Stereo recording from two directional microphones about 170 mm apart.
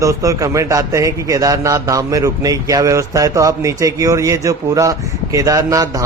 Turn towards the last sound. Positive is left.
turn(degrees=-20)  # may be behind; listen again after turning